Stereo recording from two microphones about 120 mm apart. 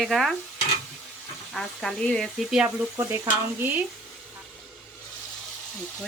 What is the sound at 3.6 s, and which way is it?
Speech, 15° right (ahead or behind).